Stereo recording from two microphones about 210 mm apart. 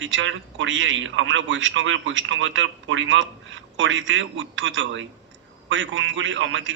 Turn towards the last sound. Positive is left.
turn(degrees=-65)  # may be behind; listen again after turning